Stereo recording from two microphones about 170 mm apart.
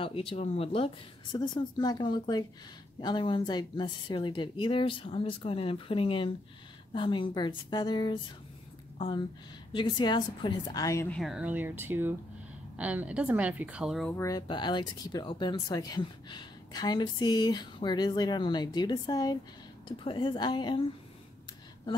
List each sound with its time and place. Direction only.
0.0 s speech: 30° left (ahead or behind)
11.1 s speech: 5° left (ahead or behind)
11.3 s a woman's voice: 10° right (ahead or behind)
14.1 s speech: 20° left (ahead or behind)